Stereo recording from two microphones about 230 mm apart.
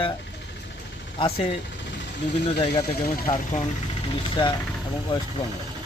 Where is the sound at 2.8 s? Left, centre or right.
Left.